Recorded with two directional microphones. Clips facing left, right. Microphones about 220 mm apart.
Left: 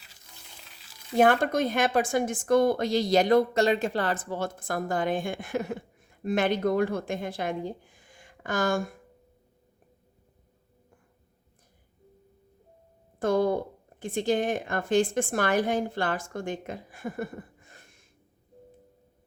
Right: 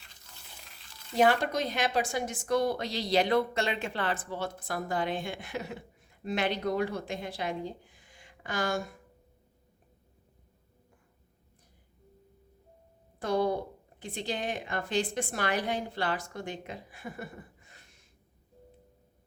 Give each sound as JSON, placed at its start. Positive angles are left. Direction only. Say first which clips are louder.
{"t": 0.6, "sound": "frying", "louder": "left 1 dB", "side_deg": 0}
{"t": 1.1, "sound": "a woman's voice", "louder": "left 4 dB", "side_deg": 50}
{"t": 13.1, "sound": "a woman's voice", "louder": "left 4 dB", "side_deg": 50}